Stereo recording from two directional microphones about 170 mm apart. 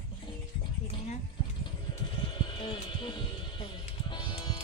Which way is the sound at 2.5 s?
30° left (ahead or behind).